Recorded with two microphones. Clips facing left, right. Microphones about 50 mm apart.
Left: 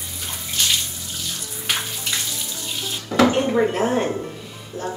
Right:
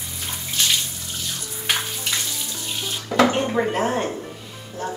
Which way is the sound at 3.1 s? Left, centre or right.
Right.